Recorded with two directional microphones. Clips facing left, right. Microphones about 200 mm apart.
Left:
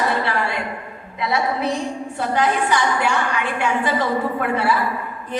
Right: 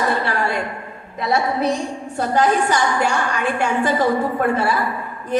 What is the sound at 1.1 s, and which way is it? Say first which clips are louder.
A woman's voice: right 2 dB; 45° right (ahead or behind).